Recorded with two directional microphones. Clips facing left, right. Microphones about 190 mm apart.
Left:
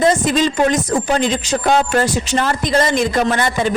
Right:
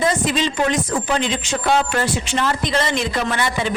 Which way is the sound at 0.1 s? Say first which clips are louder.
Left 5 dB; 45° left (ahead or behind).